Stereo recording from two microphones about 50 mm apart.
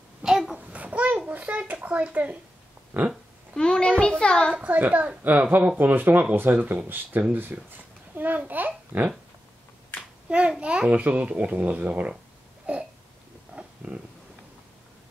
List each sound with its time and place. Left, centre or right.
0.2 s a sound: centre
0.7 s a sound: right
1.7 s a child's voice: right
3.5 s a child's voice: centre
4.6 s a woman's voice: right
10.3 s a child's voice: right
13.8 s a child's voice: right